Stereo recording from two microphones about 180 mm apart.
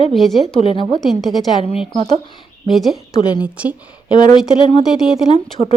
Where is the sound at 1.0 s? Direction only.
Centre (ahead or behind).